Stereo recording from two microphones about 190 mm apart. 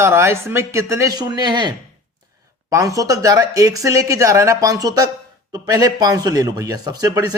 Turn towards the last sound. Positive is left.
turn(degrees=-20)  # may be behind; listen again after turning